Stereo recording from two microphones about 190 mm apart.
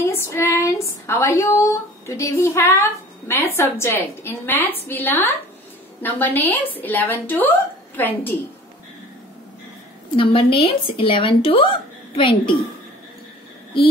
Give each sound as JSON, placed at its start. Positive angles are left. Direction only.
{"t": 0.0, "sound": "a woman's voice", "side_deg": 15}
{"t": 10.1, "sound": "speech", "side_deg": 25}